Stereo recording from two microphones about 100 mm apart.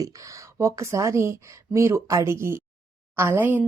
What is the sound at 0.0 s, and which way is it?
A woman's voice, 30° right (ahead or behind).